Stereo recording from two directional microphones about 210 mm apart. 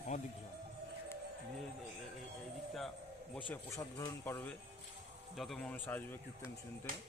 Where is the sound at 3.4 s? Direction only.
15° left (ahead or behind).